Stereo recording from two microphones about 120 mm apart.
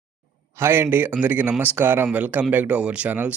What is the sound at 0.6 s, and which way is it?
Speech, 20° right (ahead or behind).